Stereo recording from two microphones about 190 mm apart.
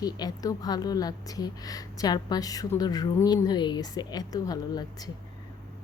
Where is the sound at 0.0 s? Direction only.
20° left (ahead or behind).